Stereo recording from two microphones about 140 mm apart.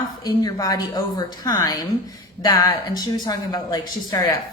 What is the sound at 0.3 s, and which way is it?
A woman's voice, 30° left (ahead or behind).